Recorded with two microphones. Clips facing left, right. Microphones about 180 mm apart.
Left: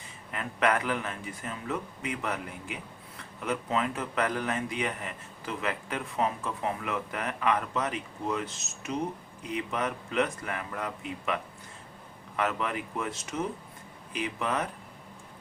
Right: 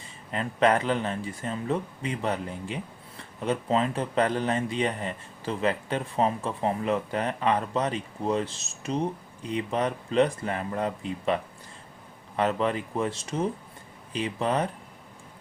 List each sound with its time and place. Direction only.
0.3 s speech: 30° right (ahead or behind)
12.4 s speech: 30° right (ahead or behind)